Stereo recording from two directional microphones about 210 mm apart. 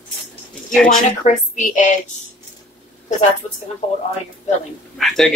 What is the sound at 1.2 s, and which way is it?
Speech, 35° left (ahead or behind).